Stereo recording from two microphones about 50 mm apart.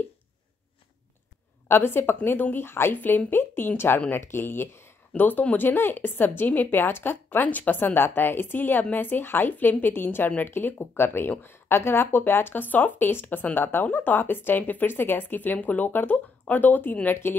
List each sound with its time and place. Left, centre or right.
1.7 s a woman's voice: left
5.1 s a woman's voice: left